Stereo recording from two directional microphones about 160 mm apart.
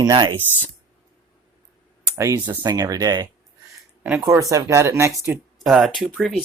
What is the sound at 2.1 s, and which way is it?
Speech, 20° right (ahead or behind).